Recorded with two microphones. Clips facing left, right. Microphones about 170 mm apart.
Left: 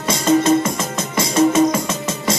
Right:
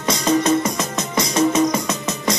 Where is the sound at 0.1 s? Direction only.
25° left (ahead or behind).